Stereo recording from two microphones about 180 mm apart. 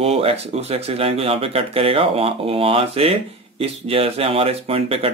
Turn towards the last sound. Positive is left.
turn(degrees=-30)  # may be behind; listen again after turning